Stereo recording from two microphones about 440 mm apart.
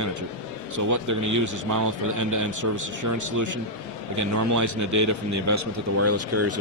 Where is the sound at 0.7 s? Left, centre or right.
Right.